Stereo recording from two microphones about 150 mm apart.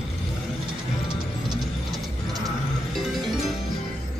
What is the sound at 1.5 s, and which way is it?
Ratchet, 25° right (ahead or behind).